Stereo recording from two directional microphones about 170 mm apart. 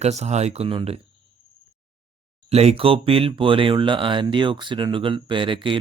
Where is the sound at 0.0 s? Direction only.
40° right (ahead or behind).